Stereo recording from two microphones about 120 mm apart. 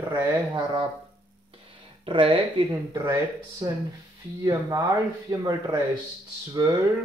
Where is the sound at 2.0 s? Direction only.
45° right (ahead or behind).